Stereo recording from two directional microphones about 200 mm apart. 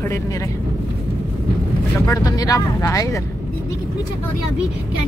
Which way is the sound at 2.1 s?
15° left (ahead or behind).